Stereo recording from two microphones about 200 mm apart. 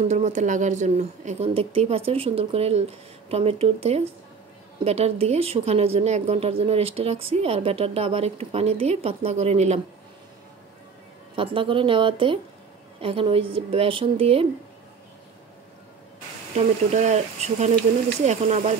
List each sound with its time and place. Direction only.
0.1 s a woman's voice: 35° right (ahead or behind)
11.3 s a woman's voice: 25° right (ahead or behind)
16.5 s speech: 35° right (ahead or behind)